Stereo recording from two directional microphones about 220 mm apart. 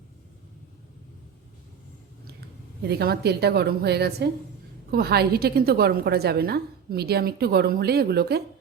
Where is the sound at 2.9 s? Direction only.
45° right (ahead or behind).